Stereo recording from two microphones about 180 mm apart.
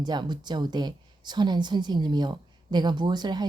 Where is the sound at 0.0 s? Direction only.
25° right (ahead or behind).